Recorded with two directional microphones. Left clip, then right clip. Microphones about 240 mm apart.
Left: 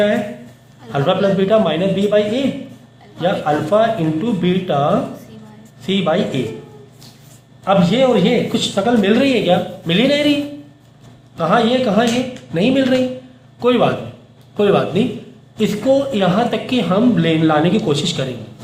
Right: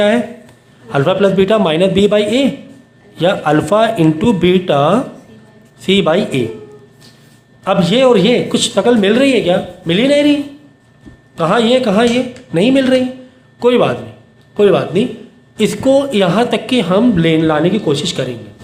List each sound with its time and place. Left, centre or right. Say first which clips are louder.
0.9 s a man's voice: right 4 dB; right
7.6 s a man's voice: right 3 dB; right
11.3 s a man's voice: right 3 dB; right